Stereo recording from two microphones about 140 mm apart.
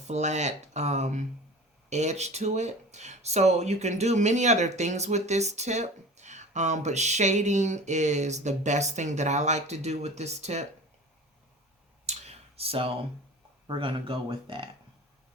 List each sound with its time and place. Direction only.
0.1 s speech: 55° right (ahead or behind)
12.0 s clicking: 50° right (ahead or behind)
13.7 s speech: 35° right (ahead or behind)